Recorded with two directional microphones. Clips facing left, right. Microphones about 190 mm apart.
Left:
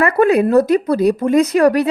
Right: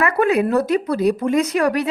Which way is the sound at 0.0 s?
40° left (ahead or behind).